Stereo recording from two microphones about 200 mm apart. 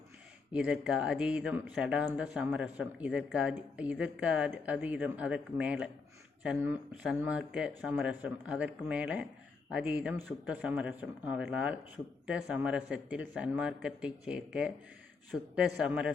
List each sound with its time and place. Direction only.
0.5 s speech: 5° right (ahead or behind)